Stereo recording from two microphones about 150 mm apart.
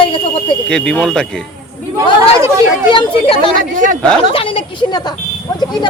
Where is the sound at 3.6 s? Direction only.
60° right (ahead or behind).